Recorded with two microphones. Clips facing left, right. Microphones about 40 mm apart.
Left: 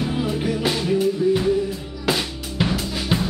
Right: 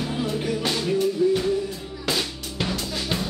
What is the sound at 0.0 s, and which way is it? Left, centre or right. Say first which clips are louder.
Music: left 3 dB; centre.